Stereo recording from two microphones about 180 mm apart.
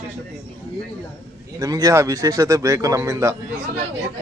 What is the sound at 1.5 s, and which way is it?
A man's voice, 20° right (ahead or behind).